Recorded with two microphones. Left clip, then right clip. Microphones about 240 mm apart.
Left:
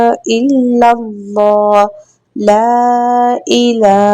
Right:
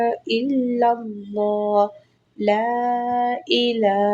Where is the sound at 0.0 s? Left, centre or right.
Left.